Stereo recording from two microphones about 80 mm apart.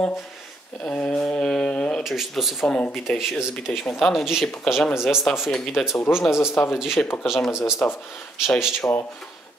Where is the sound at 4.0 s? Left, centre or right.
Centre.